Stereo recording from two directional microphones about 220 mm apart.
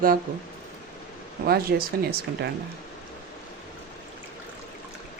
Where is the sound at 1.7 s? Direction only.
50° right (ahead or behind).